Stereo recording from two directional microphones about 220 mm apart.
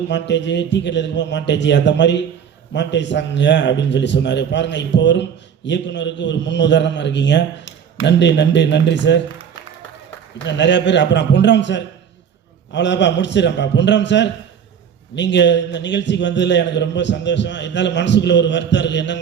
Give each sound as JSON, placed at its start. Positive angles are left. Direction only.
{"t": 0.1, "sound": "a man's voice", "side_deg": 55}
{"t": 10.4, "sound": "a man's voice", "side_deg": 55}